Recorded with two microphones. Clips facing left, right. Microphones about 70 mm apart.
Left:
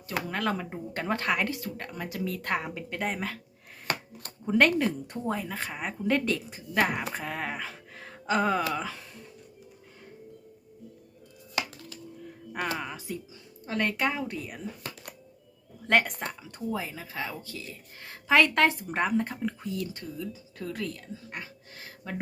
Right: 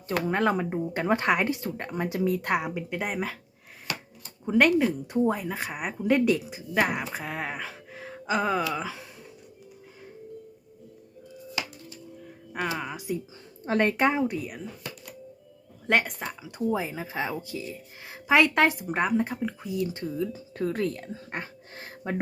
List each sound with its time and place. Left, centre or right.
0.3 s speech: right
3.9 s a sound: left
4.4 s speech: centre
12.5 s speech: centre
13.7 s speech: right
14.3 s speech: centre
15.9 s speech: centre
16.7 s speech: right
19.7 s speech: right